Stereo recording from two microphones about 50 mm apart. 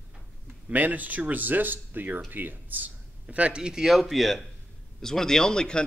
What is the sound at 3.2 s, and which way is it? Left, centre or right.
Speech, right.